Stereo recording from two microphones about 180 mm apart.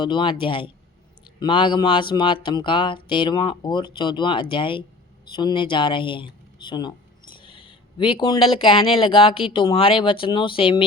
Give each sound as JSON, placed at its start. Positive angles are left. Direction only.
{"t": 0.0, "sound": "speech", "side_deg": 25}